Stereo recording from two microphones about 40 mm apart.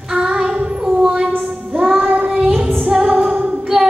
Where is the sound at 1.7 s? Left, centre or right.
Centre.